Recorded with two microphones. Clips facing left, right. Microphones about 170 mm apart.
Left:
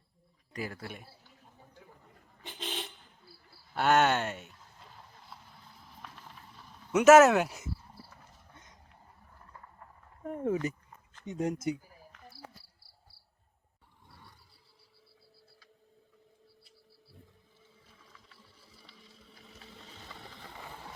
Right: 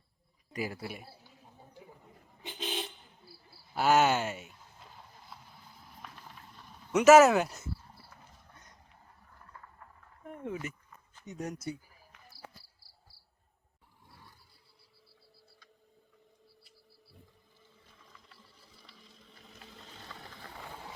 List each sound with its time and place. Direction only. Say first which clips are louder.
0.5 s a sound: right 2 dB; 10° right (ahead or behind); by 7.7 s 10° left (ahead or behind)
10.2 s speech: left 8 dB; 40° left (ahead or behind)
11.3 s speech: left 6 dB; 25° left (ahead or behind)
14.1 s roar: left 1 dB; centre (ahead or behind)
16.6 s a sound: left 1 dB; centre (ahead or behind)
17.8 s sewing machine: even; 5° left (ahead or behind)